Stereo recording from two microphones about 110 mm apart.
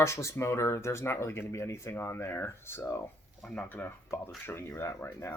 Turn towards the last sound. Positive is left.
turn(degrees=20)  # may be behind; listen again after turning